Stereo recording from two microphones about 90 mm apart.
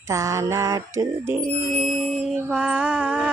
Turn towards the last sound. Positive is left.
turn(degrees=-10)  # may be behind; listen again after turning